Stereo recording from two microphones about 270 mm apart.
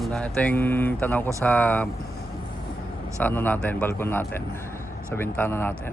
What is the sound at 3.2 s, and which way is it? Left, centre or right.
Speech, centre.